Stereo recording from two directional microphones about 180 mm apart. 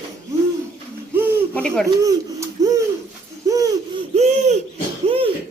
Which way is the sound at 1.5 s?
5° left (ahead or behind).